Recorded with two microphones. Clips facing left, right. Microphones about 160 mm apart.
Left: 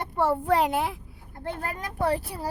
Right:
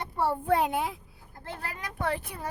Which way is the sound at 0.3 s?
80° left.